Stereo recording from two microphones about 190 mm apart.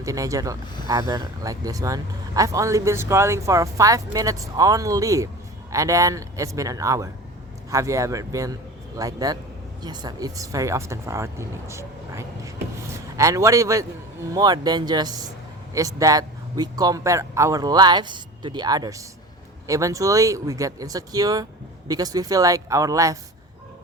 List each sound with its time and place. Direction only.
0.0 s speech: 15° right (ahead or behind)